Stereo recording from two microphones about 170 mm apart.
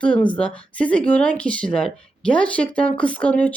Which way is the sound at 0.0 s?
5° left (ahead or behind).